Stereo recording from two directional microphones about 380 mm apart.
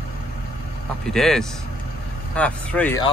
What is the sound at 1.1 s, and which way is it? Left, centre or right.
Speech, centre.